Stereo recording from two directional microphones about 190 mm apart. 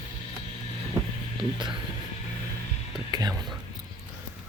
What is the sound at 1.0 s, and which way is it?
Vehicle, 20° right (ahead or behind).